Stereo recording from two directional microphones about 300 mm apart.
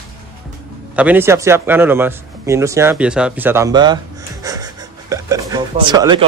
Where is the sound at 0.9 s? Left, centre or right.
Centre.